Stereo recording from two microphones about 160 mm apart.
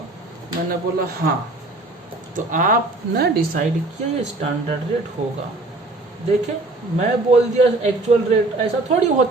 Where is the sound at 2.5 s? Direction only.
60° right (ahead or behind).